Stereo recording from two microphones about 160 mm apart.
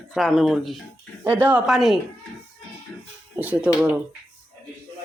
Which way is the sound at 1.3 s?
10° right (ahead or behind).